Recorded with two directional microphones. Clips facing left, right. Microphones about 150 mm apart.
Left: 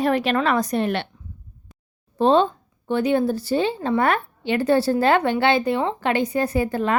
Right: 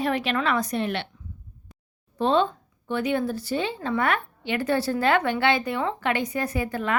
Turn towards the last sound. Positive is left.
turn(degrees=30)  # may be behind; listen again after turning